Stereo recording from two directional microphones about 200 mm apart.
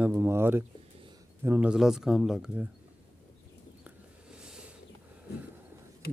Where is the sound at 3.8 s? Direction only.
5° right (ahead or behind).